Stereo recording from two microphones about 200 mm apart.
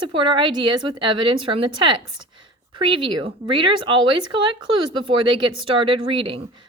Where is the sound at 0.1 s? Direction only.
25° right (ahead or behind).